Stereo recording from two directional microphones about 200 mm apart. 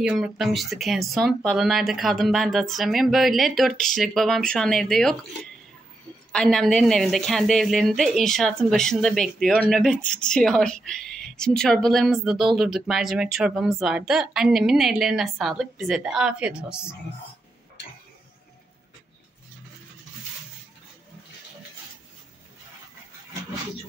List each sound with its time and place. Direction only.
0.0 s a woman's voice: centre (ahead or behind)
6.3 s a woman's voice: centre (ahead or behind)